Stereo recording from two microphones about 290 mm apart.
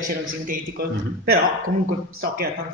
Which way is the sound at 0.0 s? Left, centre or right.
Right.